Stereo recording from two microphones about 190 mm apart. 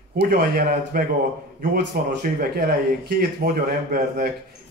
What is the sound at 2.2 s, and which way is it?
A man's voice, 55° right (ahead or behind).